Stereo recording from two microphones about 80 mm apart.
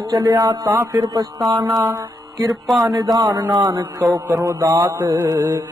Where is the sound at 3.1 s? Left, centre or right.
Right.